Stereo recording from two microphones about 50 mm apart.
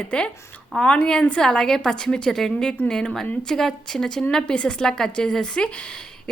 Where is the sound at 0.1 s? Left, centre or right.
Left.